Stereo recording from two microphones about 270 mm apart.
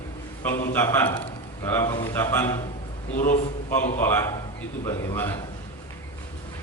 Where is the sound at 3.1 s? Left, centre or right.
Left.